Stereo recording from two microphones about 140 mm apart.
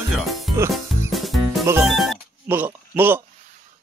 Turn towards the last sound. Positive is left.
turn(degrees=-15)  # may be behind; listen again after turning